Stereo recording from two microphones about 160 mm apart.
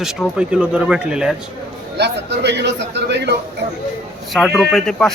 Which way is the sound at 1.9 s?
90° right.